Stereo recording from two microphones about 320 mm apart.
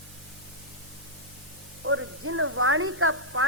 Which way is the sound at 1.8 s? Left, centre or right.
Right.